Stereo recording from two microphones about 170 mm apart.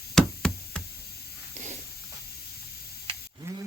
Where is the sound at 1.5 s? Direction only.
45° right (ahead or behind).